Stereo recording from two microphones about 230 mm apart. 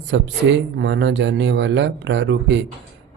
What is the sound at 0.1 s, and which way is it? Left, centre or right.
Speech, right.